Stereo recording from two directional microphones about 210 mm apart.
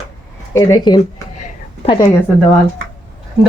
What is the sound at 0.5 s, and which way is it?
A woman's voice, 15° left (ahead or behind).